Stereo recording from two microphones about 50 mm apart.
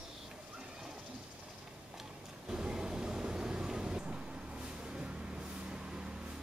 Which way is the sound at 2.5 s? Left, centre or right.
Centre.